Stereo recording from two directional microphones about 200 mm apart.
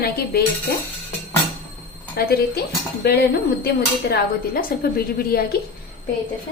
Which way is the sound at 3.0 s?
55° left (ahead or behind).